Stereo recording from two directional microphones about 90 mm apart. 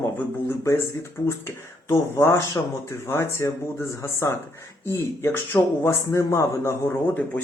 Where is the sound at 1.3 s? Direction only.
30° left (ahead or behind).